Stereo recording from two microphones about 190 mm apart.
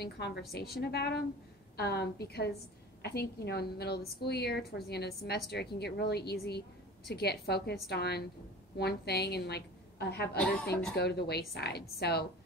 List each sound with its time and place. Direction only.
0.0 s a woman's voice: 60° left (ahead or behind)
10.3 s speech: 5° left (ahead or behind)
11.0 s a woman's voice: 60° left (ahead or behind)